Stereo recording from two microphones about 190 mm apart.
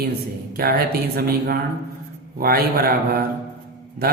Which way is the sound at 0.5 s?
50° right (ahead or behind).